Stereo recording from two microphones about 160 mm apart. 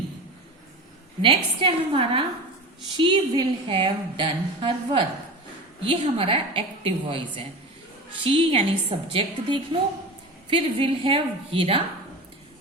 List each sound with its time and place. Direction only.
1.2 s a woman's voice: 35° right (ahead or behind)